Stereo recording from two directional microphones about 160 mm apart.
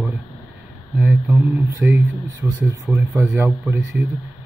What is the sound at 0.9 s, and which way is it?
Speech, 10° right (ahead or behind).